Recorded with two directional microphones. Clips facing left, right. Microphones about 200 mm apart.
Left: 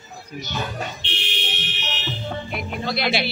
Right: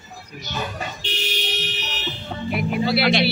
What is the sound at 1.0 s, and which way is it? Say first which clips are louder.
Fire alarm: right 4 dB; 40° right (ahead or behind).